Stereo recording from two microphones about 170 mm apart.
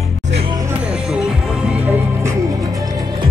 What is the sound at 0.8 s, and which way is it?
Music, 5° right (ahead or behind).